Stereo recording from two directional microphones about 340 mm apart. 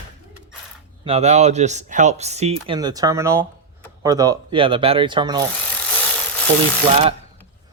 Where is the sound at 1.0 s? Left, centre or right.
Centre.